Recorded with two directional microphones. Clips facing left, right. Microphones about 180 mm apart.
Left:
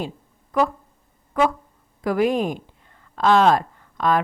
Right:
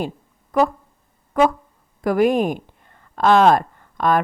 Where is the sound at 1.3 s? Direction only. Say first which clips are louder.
Right 3 dB; 40° right (ahead or behind).